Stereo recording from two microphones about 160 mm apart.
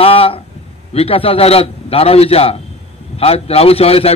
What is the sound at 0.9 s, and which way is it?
A man's voice, 35° left (ahead or behind).